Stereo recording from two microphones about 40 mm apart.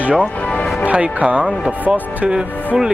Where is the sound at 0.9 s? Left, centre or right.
Right.